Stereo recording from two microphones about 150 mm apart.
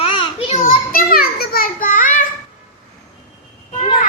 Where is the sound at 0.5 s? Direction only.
65° left (ahead or behind).